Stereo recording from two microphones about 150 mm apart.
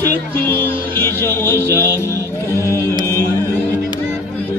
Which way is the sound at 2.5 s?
20° left (ahead or behind).